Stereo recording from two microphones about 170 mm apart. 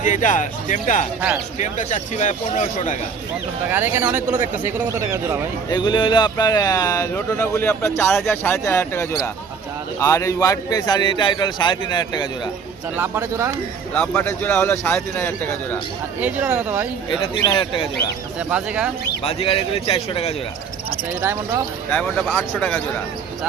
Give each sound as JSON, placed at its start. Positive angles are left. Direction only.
{"t": 0.0, "sound": "speech", "side_deg": 50}
{"t": 3.7, "sound": "speech", "side_deg": -10}
{"t": 5.7, "sound": "speech", "side_deg": 25}
{"t": 13.0, "sound": "speech", "side_deg": -15}
{"t": 13.9, "sound": "speech", "side_deg": 5}
{"t": 16.2, "sound": "speech", "side_deg": -10}
{"t": 17.4, "sound": "speech", "side_deg": 25}
{"t": 18.3, "sound": "speech", "side_deg": -5}
{"t": 19.2, "sound": "a man's voice", "side_deg": 35}
{"t": 21.2, "sound": "speech", "side_deg": -15}
{"t": 22.3, "sound": "speech", "side_deg": 10}